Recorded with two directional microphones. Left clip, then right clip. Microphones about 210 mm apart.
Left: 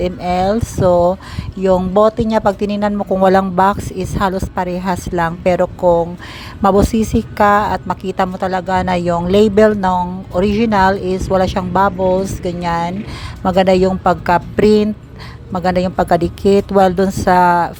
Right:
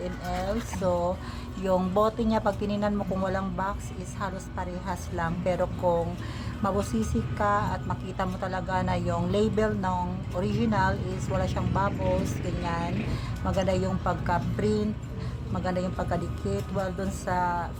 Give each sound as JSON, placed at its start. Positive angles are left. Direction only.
{"t": 0.0, "sound": "a woman's voice", "side_deg": 40}